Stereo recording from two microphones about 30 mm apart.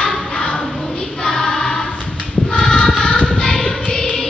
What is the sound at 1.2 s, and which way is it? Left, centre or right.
Choir, centre.